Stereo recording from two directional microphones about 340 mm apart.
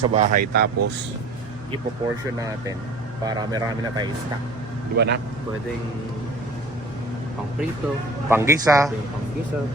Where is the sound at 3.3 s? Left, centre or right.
Centre.